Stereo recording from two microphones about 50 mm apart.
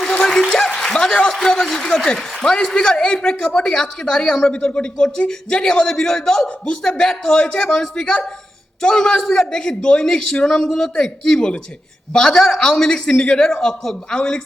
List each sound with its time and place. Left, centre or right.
0.4 s a man's voice: centre
0.7 s a sound: centre
1.3 s a man's voice: centre